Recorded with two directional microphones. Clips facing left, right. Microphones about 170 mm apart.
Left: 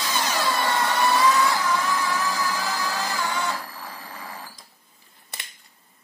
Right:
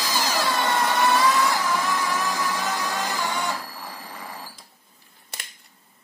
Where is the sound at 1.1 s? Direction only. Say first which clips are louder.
Even; 10° right (ahead or behind).